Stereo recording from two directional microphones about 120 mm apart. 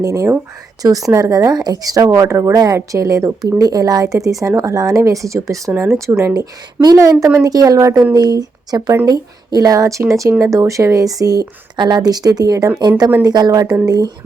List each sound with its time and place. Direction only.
0.0 s a woman's voice: 30° right (ahead or behind)